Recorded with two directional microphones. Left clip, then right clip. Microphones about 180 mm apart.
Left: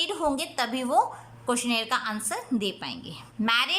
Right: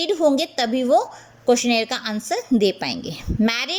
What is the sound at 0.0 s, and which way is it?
A woman's voice, 20° right (ahead or behind).